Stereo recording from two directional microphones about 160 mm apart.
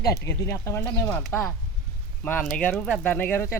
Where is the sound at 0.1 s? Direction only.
15° left (ahead or behind).